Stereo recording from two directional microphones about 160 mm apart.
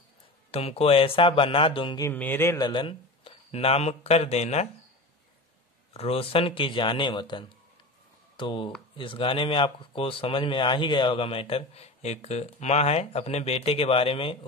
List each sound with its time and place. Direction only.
0.5 s speech: 40° left (ahead or behind)
2.0 s speech: 10° left (ahead or behind)
2.7 s speech: 30° left (ahead or behind)
5.9 s speech: 35° left (ahead or behind)